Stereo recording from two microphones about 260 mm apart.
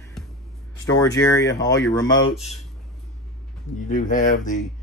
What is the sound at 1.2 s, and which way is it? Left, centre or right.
Speech, centre.